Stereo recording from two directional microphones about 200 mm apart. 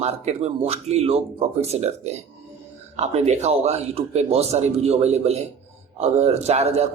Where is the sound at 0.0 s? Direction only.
35° right (ahead or behind).